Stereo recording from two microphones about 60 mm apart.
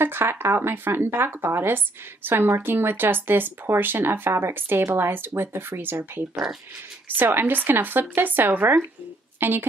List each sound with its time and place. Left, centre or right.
0.0 s speech: right